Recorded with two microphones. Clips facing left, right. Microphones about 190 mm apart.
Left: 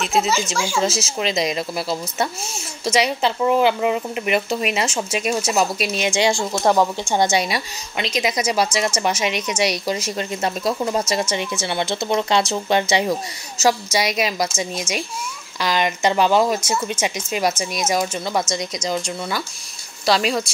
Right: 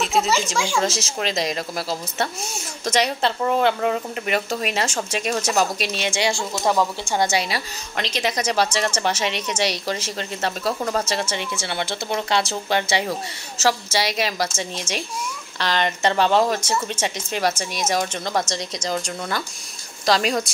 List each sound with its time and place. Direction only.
0.1 s speech: 5° left (ahead or behind)
1.0 s speech: 35° right (ahead or behind)
2.8 s a woman's voice: 5° left (ahead or behind)
14.1 s a woman's voice: 15° left (ahead or behind)